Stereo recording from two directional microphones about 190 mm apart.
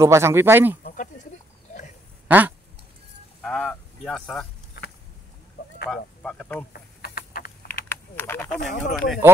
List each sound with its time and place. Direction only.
0.0 s speech: 15° right (ahead or behind)
2.2 s speech: 10° right (ahead or behind)
3.4 s speech: 5° left (ahead or behind)
5.9 s speech: 5° left (ahead or behind)
6.7 s insect: 50° left (ahead or behind)
7.9 s a sound: 10° left (ahead or behind)
8.5 s speech: 40° left (ahead or behind)